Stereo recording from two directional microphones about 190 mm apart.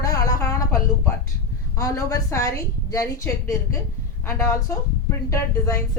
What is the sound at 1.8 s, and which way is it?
A woman's voice, 15° left (ahead or behind).